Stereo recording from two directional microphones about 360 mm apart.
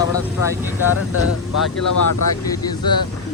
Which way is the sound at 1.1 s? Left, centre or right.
Left.